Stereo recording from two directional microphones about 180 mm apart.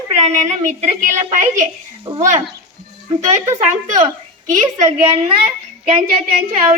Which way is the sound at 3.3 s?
40° right (ahead or behind).